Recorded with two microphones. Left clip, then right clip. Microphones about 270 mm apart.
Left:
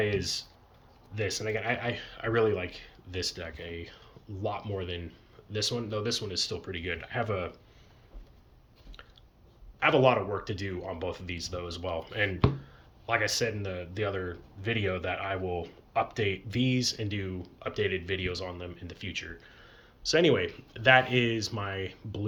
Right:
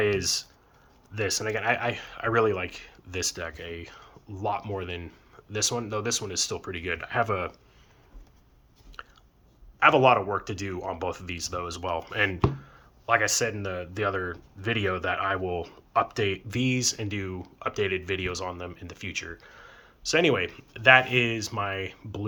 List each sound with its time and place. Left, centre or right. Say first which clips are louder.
0.0 s speech: right 5 dB; centre
9.0 s chewing: right 9 dB; centre
9.8 s speech: right 5 dB; centre